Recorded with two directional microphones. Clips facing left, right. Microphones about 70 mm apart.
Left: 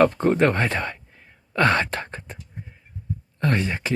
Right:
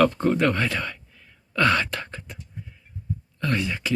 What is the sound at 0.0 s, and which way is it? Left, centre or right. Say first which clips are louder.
Speech: left 2 dB; left.